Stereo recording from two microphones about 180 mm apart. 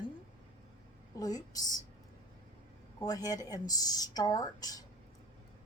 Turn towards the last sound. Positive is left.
turn(degrees=20)  # may be behind; listen again after turning